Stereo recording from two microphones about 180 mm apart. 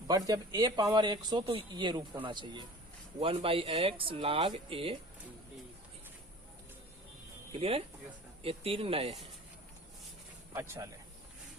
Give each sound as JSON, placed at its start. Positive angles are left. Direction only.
{"t": 0.1, "sound": "speech", "side_deg": -20}
{"t": 7.5, "sound": "speech", "side_deg": -30}
{"t": 10.5, "sound": "speech", "side_deg": -15}